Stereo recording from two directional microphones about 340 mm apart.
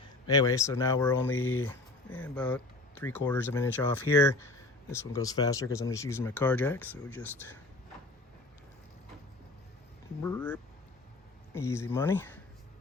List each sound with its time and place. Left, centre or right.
0.3 s speech: centre
1.4 s speech: left
1.6 s speech: centre
10.2 s speech: centre